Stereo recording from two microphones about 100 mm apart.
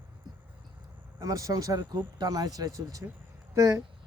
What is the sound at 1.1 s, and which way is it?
Speech, 35° right (ahead or behind).